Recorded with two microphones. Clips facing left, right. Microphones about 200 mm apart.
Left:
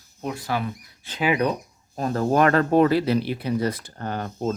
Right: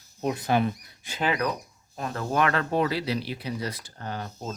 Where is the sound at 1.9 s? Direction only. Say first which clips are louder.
Left 7 dB; 40° left (ahead or behind).